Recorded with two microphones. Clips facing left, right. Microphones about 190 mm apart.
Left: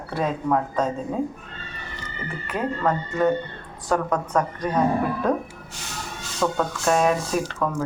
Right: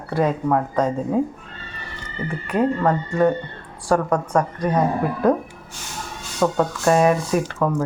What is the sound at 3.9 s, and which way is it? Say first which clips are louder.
Speech: right 4 dB; 10° right (ahead or behind).